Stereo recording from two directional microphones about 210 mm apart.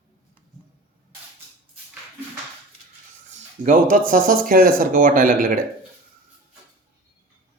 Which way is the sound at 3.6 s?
40° right (ahead or behind).